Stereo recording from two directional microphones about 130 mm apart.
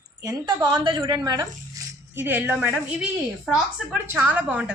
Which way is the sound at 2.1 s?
15° right (ahead or behind).